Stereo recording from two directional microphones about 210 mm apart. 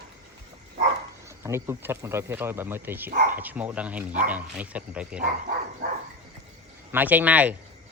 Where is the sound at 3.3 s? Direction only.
10° right (ahead or behind).